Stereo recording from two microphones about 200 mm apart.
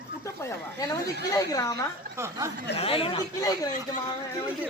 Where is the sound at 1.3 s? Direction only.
20° left (ahead or behind).